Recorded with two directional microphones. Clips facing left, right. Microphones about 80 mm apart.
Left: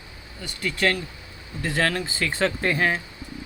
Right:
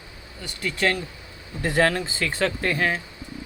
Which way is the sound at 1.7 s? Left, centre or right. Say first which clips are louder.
Right 4 dB; centre.